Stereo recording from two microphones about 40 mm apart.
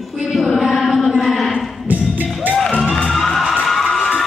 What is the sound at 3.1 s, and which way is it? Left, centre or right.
Music, centre.